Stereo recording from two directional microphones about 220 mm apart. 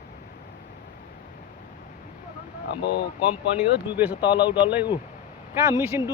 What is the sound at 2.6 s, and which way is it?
Speech, 50° left (ahead or behind).